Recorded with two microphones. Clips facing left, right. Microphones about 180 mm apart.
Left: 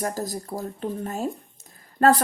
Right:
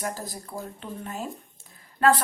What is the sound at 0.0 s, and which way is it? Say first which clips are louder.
Speech: left 5 dB; 40° left (ahead or behind).